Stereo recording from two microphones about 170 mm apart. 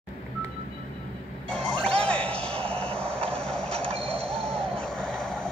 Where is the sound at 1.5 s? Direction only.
5° left (ahead or behind).